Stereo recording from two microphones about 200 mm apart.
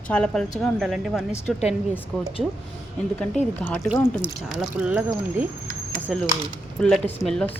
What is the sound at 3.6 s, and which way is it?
Speech, 10° left (ahead or behind).